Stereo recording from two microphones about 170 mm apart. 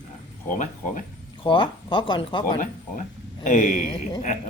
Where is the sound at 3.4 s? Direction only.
45° left (ahead or behind).